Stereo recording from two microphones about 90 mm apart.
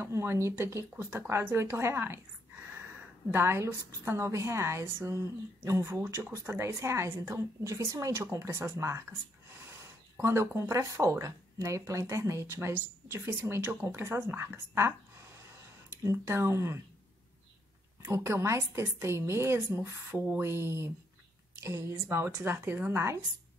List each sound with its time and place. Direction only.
0.0 s speech: 30° right (ahead or behind)
3.3 s a woman's voice: 25° right (ahead or behind)
10.1 s speech: 30° right (ahead or behind)
16.0 s speech: 30° right (ahead or behind)
18.0 s a woman's voice: 30° right (ahead or behind)